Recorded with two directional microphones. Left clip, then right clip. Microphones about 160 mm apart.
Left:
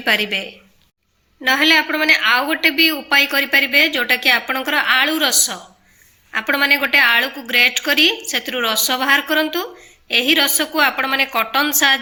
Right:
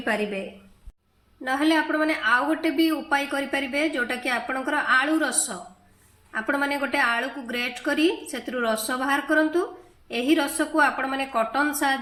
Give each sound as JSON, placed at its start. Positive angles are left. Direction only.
{"t": 0.0, "sound": "speech", "side_deg": 20}
{"t": 1.4, "sound": "speech", "side_deg": 25}